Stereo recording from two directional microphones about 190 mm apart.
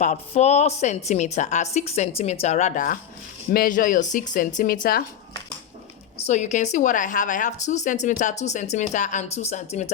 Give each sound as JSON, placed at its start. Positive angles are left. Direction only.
{"t": 0.0, "sound": "speech", "side_deg": 35}
{"t": 6.2, "sound": "speech", "side_deg": 40}